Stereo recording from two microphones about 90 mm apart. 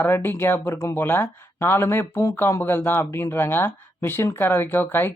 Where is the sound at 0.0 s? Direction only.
25° left (ahead or behind).